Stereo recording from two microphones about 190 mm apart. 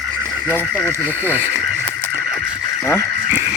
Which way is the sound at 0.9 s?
10° right (ahead or behind).